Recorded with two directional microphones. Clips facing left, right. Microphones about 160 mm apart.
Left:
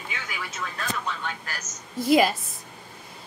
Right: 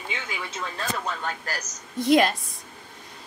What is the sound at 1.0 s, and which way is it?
Speech, 40° right (ahead or behind).